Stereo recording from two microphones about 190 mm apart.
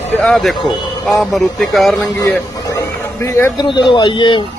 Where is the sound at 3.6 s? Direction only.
25° left (ahead or behind).